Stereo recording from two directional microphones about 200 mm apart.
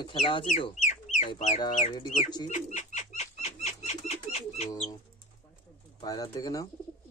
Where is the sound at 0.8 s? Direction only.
35° left (ahead or behind).